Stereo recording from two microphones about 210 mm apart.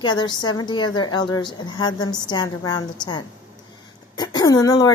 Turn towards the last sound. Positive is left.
turn(degrees=15)  # may be behind; listen again after turning